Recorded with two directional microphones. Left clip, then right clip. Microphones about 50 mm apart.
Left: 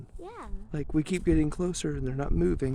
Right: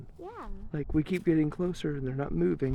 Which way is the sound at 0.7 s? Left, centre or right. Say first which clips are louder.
Left 1 dB; left.